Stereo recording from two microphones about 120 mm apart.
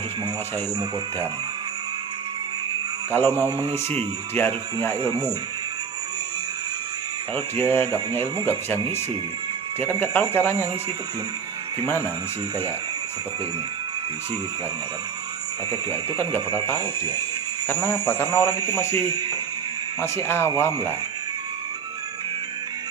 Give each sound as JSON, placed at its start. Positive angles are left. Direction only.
{"t": 3.1, "sound": "a man's voice", "side_deg": 20}
{"t": 4.9, "sound": "speech", "side_deg": -35}
{"t": 7.3, "sound": "a man's voice", "side_deg": 20}
{"t": 11.9, "sound": "a man's voice", "side_deg": 20}
{"t": 17.7, "sound": "a man's voice", "side_deg": 20}
{"t": 19.0, "sound": "speech", "side_deg": -35}
{"t": 20.0, "sound": "a man's voice", "side_deg": 20}